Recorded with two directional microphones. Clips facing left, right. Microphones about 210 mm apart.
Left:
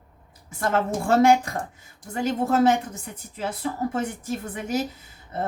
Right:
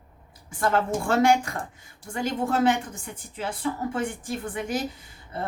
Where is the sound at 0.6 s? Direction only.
40° left (ahead or behind).